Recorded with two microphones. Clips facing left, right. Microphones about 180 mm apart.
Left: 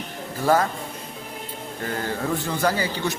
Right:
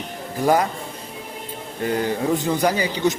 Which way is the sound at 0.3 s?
15° right (ahead or behind).